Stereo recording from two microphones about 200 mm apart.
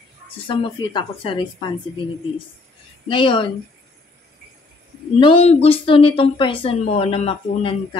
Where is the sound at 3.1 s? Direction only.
25° left (ahead or behind).